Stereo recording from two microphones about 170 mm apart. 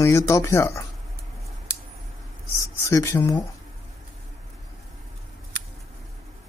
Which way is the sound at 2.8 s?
20° left (ahead or behind).